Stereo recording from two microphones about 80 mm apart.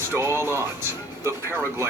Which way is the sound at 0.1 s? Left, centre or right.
Right.